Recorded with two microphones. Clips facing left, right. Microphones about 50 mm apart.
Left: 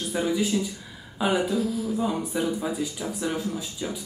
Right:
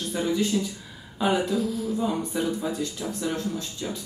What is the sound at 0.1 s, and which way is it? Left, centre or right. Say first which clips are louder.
Speech: even; centre.